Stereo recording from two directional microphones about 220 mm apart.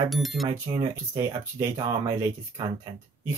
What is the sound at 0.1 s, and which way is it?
Speech, centre (ahead or behind).